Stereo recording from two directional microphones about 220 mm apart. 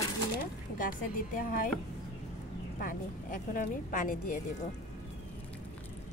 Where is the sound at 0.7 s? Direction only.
40° left (ahead or behind).